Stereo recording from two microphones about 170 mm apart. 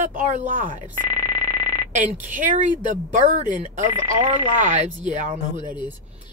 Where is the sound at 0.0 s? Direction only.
50° right (ahead or behind).